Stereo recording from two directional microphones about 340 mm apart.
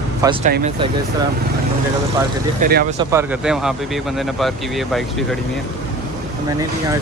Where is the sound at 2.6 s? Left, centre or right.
Right.